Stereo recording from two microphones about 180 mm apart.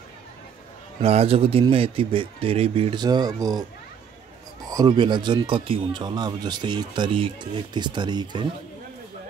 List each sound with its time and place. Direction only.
1.0 s speech: 35° right (ahead or behind)
4.6 s speech: 20° right (ahead or behind)